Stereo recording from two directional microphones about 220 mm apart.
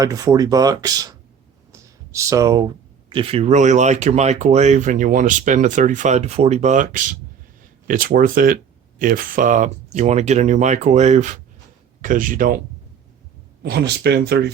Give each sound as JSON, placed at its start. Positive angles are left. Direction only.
{"t": 0.0, "sound": "speech", "side_deg": -15}
{"t": 1.7, "sound": "a sound", "side_deg": -15}
{"t": 3.1, "sound": "speech", "side_deg": -25}
{"t": 13.6, "sound": "speech", "side_deg": -50}